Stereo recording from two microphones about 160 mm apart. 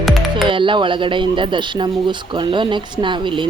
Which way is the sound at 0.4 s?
30° right (ahead or behind).